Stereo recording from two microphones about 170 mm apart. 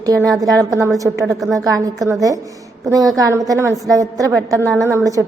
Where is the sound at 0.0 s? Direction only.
20° right (ahead or behind).